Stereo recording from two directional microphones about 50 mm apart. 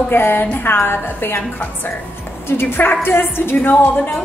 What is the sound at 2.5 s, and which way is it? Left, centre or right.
A woman's voice, left.